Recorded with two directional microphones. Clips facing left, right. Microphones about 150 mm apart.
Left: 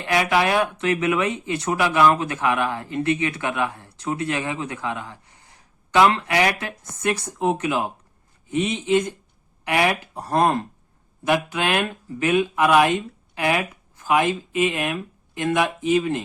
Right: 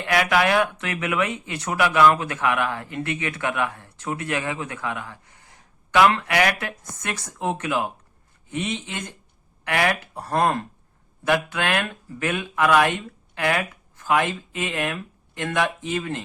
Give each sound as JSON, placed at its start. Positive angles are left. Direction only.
{"t": 0.0, "sound": "speech", "side_deg": 20}